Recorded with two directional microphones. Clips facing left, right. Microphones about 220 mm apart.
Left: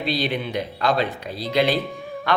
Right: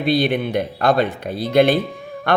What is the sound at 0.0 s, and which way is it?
A man's voice, 50° right (ahead or behind).